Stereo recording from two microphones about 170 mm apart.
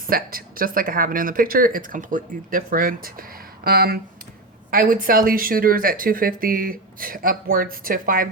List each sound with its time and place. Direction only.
0.1 s speech: 60° right (ahead or behind)